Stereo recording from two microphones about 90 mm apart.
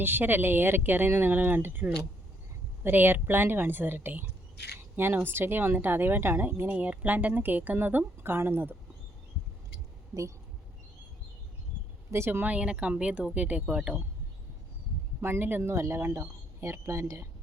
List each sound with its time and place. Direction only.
0.0 s speech: 20° right (ahead or behind)
12.1 s speech: 25° right (ahead or behind)
12.5 s speech: 10° right (ahead or behind)
15.2 s speech: 25° right (ahead or behind)